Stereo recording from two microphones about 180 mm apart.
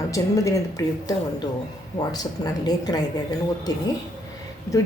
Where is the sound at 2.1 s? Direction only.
20° left (ahead or behind).